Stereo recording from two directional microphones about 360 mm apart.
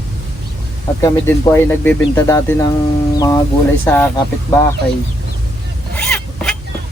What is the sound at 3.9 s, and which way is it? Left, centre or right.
Speech, centre.